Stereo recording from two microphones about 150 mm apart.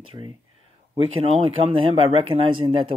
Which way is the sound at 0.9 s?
40° right (ahead or behind).